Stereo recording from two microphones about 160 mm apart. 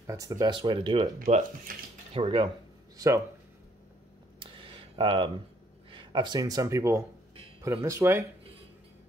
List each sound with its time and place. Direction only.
0.0 s speech: 20° right (ahead or behind)
1.2 s speech: 55° right (ahead or behind)
2.1 s speech: 35° right (ahead or behind)
3.0 s speech: 20° right (ahead or behind)
4.4 s a sound: 30° right (ahead or behind)
5.9 s speech: 30° right (ahead or behind)